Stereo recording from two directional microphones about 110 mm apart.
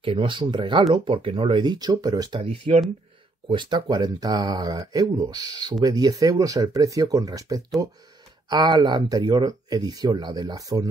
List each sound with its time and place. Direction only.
0.0 s speech: 55° right (ahead or behind); by 2.4 s 40° right (ahead or behind)
2.4 s speech: 60° right (ahead or behind)
3.4 s speech: 45° right (ahead or behind)